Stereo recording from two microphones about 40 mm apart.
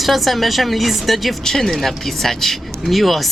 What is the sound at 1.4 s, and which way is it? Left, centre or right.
Speech, centre.